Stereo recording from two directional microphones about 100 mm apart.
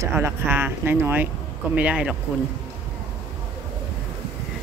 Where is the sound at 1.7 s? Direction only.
10° right (ahead or behind).